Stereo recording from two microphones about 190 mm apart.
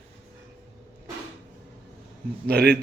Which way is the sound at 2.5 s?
60° right (ahead or behind).